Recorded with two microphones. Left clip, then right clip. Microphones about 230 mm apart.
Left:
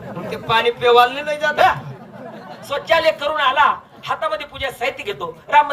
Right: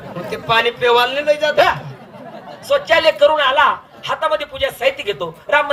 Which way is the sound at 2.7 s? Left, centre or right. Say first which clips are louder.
Right 3 dB; left.